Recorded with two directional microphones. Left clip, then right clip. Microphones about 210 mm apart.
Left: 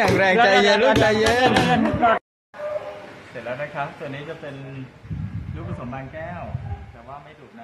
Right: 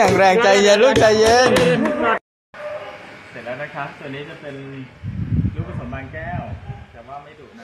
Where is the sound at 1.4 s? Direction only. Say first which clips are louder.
Right 3 dB; 30° left (ahead or behind).